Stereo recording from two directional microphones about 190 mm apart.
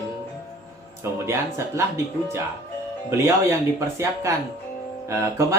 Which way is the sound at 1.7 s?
15° right (ahead or behind).